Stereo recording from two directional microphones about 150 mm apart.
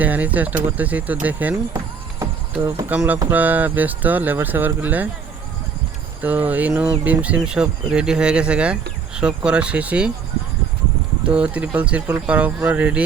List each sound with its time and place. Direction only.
0.0 s speech: 10° right (ahead or behind)
2.1 s horse: 20° right (ahead or behind)
2.9 s speech: 10° right (ahead or behind)
6.2 s speech: 10° right (ahead or behind)
11.2 s speech: 10° right (ahead or behind)